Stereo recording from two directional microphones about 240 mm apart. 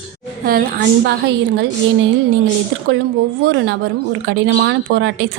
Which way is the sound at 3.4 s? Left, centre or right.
Right.